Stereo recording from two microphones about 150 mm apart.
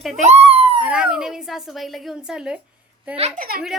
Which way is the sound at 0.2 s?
45° right (ahead or behind).